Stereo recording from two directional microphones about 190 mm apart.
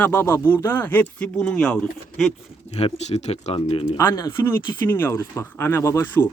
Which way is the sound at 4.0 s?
15° left (ahead or behind).